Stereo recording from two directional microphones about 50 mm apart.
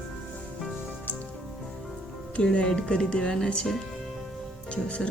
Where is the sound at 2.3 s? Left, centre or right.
Left.